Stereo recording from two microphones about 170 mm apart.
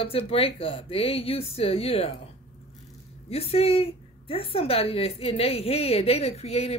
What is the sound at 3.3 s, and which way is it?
A woman's voice, 35° left (ahead or behind).